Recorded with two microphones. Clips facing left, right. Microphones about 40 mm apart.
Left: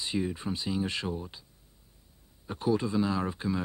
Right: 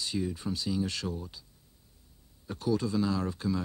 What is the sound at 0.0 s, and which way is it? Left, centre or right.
Speech, left.